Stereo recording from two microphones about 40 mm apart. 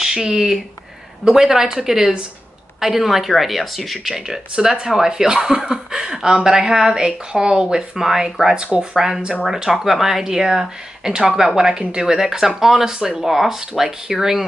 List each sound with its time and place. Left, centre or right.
0.0 s speech: centre